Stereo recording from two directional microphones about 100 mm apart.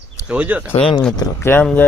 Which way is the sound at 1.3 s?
25° left (ahead or behind).